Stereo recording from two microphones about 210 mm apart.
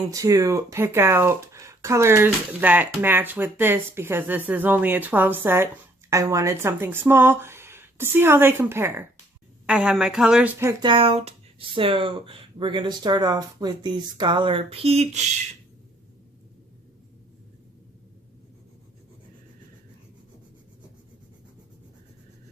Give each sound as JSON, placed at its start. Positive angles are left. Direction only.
{"t": 0.1, "sound": "speech", "side_deg": -15}